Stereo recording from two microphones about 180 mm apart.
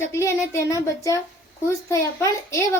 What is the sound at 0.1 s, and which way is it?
A child's voice, 15° left (ahead or behind).